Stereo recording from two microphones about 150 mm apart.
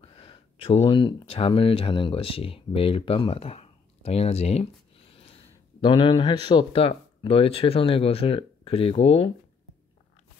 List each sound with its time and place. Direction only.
0.0 s speech: 40° left (ahead or behind)